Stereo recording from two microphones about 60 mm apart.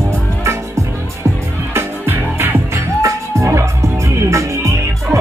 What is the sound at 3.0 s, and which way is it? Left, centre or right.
Music, right.